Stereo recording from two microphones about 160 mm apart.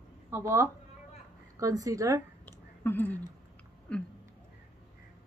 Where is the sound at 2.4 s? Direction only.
10° left (ahead or behind).